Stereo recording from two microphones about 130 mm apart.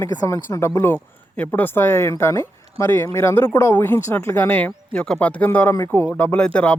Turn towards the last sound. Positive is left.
turn(degrees=10)  # may be behind; listen again after turning